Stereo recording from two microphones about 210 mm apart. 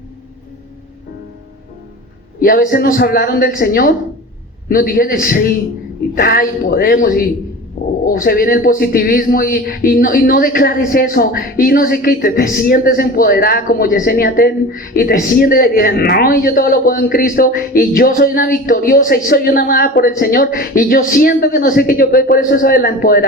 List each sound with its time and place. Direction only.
2.4 s speech: 40° left (ahead or behind)